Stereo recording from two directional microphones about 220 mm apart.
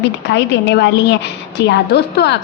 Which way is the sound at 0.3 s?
50° left (ahead or behind).